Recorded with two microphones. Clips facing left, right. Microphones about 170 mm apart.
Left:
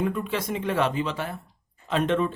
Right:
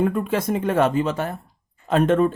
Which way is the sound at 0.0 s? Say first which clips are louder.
Right 6 dB; 50° right (ahead or behind).